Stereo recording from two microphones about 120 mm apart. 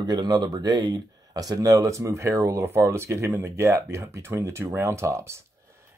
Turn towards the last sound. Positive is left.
turn(degrees=-20)  # may be behind; listen again after turning